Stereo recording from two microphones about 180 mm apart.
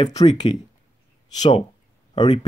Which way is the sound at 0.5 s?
25° left (ahead or behind).